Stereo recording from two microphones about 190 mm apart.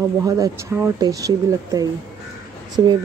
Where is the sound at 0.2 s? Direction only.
15° right (ahead or behind).